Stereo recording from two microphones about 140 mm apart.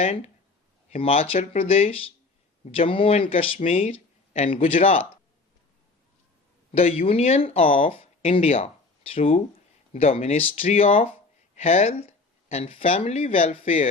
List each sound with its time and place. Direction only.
0.0 s speech: 55° left (ahead or behind)
0.9 s speech: 45° left (ahead or behind)
3.6 s speech: 55° left (ahead or behind)
3.9 s a sound: 40° left (ahead or behind)
4.8 s speech: 45° left (ahead or behind)
6.7 s speech: 45° left (ahead or behind)